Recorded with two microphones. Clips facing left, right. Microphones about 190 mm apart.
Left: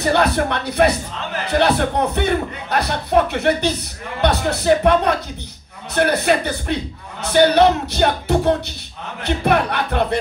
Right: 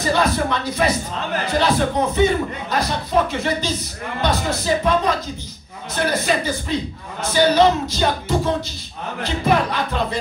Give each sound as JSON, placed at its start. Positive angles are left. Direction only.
{"t": 0.0, "sound": "speech", "side_deg": 65}